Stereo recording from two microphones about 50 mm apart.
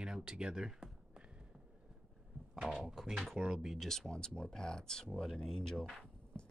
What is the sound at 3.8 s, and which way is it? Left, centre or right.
Speech, centre.